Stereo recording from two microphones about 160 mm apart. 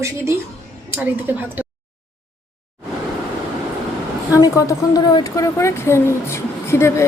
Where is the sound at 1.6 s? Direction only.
10° right (ahead or behind).